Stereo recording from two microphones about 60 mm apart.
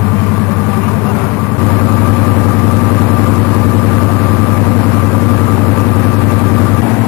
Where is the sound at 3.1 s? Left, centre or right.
Centre.